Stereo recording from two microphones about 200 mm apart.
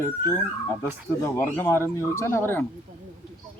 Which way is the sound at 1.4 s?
10° left (ahead or behind).